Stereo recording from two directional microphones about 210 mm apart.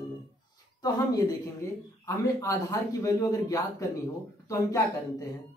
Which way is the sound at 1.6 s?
15° left (ahead or behind).